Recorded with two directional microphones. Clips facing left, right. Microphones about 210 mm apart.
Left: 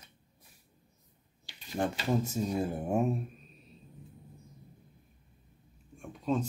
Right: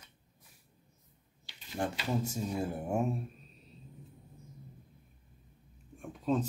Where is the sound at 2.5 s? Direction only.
20° left (ahead or behind).